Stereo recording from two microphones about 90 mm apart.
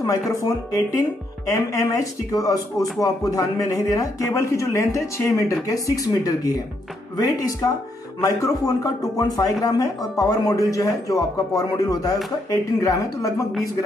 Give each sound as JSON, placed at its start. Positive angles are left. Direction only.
{"t": 0.4, "sound": "speech", "side_deg": 40}